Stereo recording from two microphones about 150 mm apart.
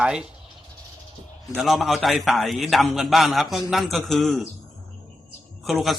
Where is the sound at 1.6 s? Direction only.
Centre (ahead or behind).